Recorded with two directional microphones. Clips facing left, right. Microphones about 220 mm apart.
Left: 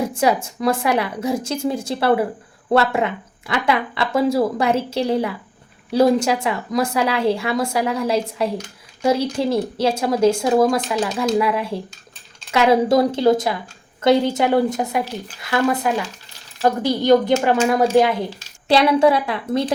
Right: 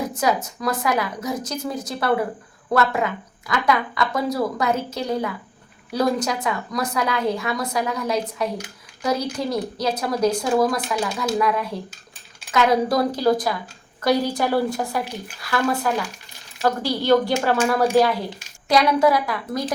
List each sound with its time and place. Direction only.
0.1 s a woman's voice: 30° left (ahead or behind)